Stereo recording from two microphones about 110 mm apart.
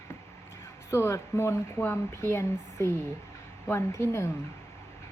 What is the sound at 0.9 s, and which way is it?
Speech, 25° left (ahead or behind).